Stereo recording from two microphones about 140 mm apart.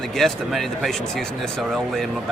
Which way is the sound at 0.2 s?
Centre (ahead or behind).